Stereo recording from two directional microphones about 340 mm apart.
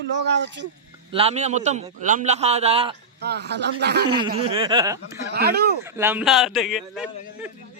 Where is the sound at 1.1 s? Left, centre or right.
Centre.